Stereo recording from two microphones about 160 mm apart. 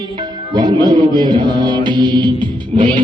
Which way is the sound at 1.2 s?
30° right (ahead or behind).